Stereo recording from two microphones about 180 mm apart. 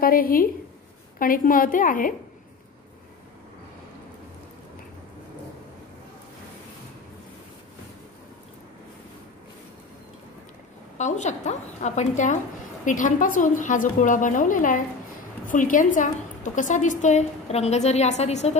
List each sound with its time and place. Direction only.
0.0 s a woman's voice: 50° left (ahead or behind)
11.0 s a woman's voice: 40° left (ahead or behind)